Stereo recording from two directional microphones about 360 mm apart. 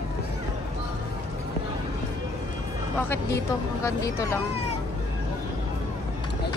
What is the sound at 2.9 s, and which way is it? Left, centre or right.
Speech, centre.